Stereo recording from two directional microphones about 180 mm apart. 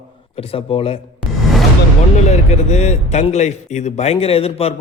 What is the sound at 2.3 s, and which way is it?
A man's voice, 35° left (ahead or behind).